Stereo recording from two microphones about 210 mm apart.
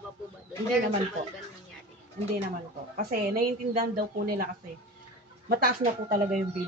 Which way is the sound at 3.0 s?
45° right (ahead or behind).